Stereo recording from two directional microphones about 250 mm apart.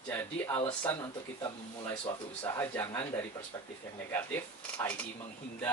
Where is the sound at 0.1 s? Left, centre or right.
Centre.